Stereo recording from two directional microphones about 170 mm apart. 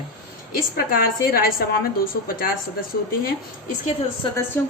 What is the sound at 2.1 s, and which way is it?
Speech, 85° left.